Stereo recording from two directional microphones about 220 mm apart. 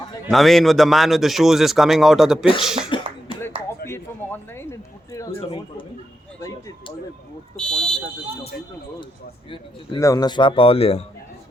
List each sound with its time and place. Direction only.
0.3 s a man's voice: centre (ahead or behind)
3.8 s a sound: 10° left (ahead or behind)
7.5 s a man's voice: 5° left (ahead or behind)
9.5 s speech: 20° left (ahead or behind)